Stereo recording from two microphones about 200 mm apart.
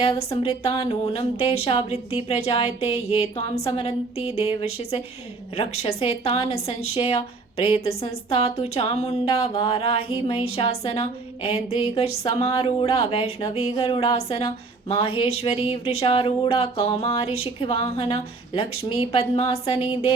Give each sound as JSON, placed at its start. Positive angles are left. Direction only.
{"t": 0.9, "sound": "a woman's voice", "side_deg": 30}